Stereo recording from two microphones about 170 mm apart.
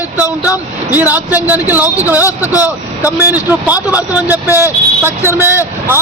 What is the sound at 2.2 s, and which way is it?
Speech, 20° left (ahead or behind).